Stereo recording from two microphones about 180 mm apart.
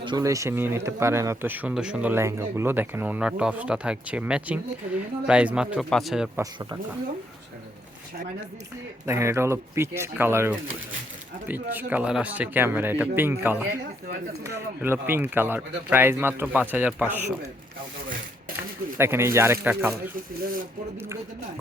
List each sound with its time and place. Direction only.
0.0 s a man's voice: 20° right (ahead or behind); by 6.3 s centre (ahead or behind)
6.3 s speech: 20° right (ahead or behind)
9.0 s speech: 15° right (ahead or behind)
18.9 s speech: 15° right (ahead or behind)